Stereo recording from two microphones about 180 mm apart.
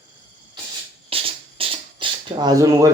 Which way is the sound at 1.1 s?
30° right (ahead or behind).